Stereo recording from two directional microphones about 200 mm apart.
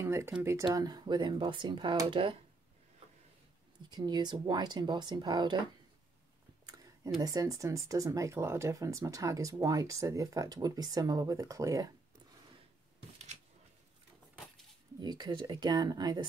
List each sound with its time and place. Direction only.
0.0 s speech: 15° right (ahead or behind)
3.9 s speech: 20° right (ahead or behind)
7.2 s speech: 20° right (ahead or behind)
15.0 s speech: 20° right (ahead or behind)